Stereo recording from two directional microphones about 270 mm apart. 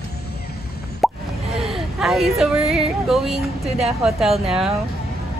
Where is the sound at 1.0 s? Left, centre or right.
Centre.